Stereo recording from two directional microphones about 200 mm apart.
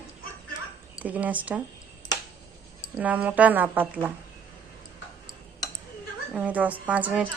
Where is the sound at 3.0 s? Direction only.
5° right (ahead or behind).